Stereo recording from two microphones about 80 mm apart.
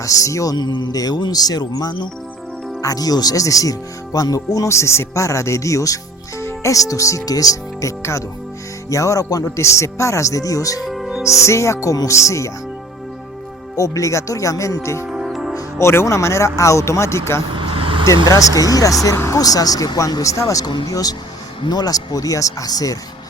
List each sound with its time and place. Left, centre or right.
0.0 s speech: left
0.5 s speech: left
10.8 s music: centre
11.2 s speech: left
13.7 s speech: left
15.0 s music: centre
15.8 s speech: left
17.5 s vehicle: right
18.3 s speech: left
19.4 s speech: left